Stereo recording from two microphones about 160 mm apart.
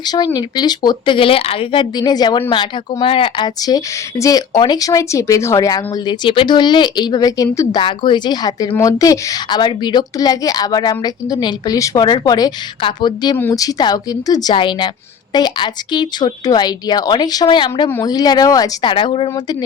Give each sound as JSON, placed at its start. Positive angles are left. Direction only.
{"t": 0.0, "sound": "a woman's voice", "side_deg": 25}
{"t": 7.8, "sound": "a woman's voice", "side_deg": 30}
{"t": 13.3, "sound": "a woman's voice", "side_deg": 15}